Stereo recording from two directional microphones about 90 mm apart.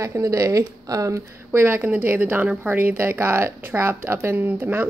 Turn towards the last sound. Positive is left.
turn(degrees=-25)  # may be behind; listen again after turning